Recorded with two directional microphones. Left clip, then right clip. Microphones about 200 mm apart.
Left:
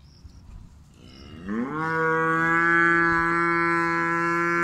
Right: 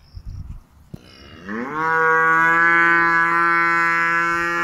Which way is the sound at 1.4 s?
55° left (ahead or behind).